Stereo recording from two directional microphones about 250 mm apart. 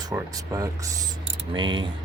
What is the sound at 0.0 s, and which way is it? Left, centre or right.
Speech, centre.